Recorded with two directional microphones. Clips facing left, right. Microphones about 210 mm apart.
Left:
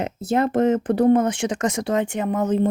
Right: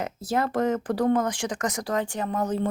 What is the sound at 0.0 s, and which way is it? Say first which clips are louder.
A woman's voice: left 5 dB; 25° left (ahead or behind).